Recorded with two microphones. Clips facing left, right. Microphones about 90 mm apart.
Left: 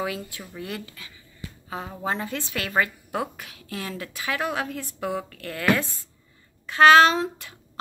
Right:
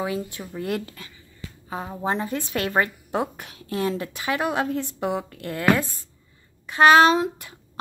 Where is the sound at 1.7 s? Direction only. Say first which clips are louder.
Right 3 dB; 25° right (ahead or behind).